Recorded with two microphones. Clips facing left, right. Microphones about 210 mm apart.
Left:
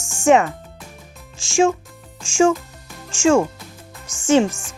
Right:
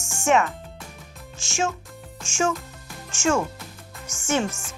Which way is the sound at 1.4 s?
30° left (ahead or behind).